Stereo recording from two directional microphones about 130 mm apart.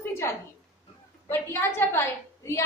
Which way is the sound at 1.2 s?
20° left (ahead or behind).